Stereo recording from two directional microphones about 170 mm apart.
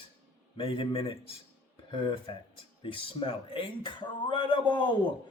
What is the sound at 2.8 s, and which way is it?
Speech, 30° left (ahead or behind).